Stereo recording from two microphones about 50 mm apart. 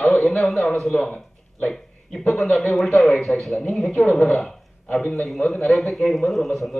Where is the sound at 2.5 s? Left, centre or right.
Centre.